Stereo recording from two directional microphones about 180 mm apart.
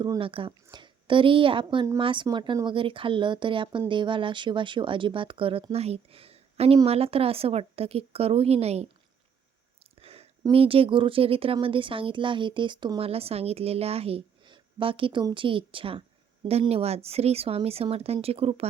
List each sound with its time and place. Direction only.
0.0 s a woman's voice: 25° right (ahead or behind)
10.0 s a sound: 35° right (ahead or behind)
10.4 s speech: 30° right (ahead or behind)